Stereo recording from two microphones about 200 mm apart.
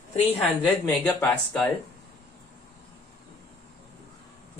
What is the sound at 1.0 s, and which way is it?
Speech, 10° left (ahead or behind).